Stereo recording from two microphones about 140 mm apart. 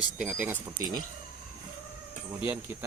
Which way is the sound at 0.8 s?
25° right (ahead or behind).